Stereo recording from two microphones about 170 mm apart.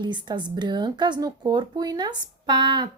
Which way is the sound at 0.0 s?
25° right (ahead or behind).